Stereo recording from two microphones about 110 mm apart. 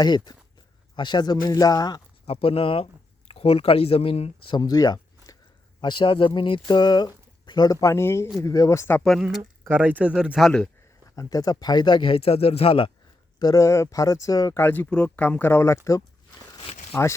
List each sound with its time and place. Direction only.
0.0 s speech: 40° left (ahead or behind)
2.2 s speech: 60° left (ahead or behind)
4.5 s a sound: 35° left (ahead or behind)
5.8 s speech: 45° left (ahead or behind); by 9.0 s 25° left (ahead or behind)
9.6 s speech: 15° right (ahead or behind)
10.3 s speech: 5° left (ahead or behind)
11.1 s speech: 35° left (ahead or behind); by 12.9 s 60° left (ahead or behind)
13.4 s speech: 30° left (ahead or behind)
14.6 s speech: 20° left (ahead or behind)
16.6 s a sound: 75° left (ahead or behind)